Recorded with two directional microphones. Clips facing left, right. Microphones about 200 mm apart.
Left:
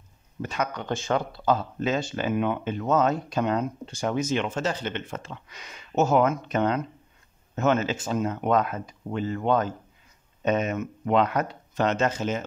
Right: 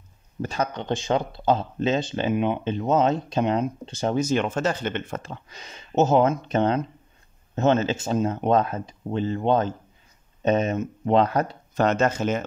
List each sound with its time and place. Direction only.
0.4 s speech: 30° right (ahead or behind)
4.1 s speech: 35° right (ahead or behind); by 12.4 s 55° right (ahead or behind)